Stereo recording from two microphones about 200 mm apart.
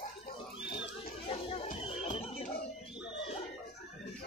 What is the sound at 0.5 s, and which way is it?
Pig, 60° left (ahead or behind).